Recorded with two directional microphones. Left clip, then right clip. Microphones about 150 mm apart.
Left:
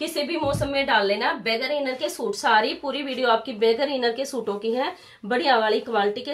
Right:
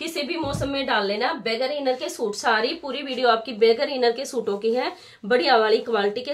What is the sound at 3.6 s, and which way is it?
Speech, 20° right (ahead or behind).